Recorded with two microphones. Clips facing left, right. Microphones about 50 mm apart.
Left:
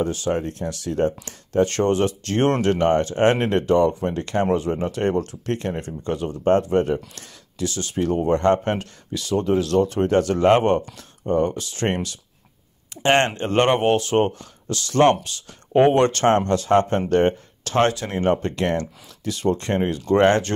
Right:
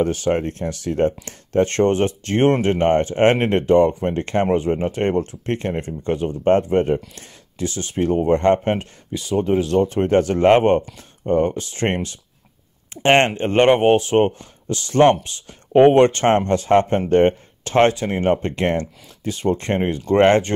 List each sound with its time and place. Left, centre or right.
0.0 s speech: right